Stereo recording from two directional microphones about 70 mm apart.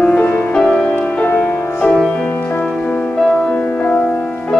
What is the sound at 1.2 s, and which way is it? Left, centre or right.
Music, left.